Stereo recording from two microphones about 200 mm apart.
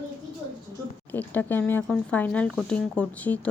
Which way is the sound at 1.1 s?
10° left (ahead or behind).